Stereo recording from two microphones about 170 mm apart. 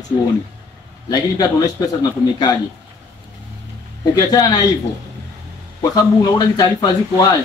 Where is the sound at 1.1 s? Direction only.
20° left (ahead or behind).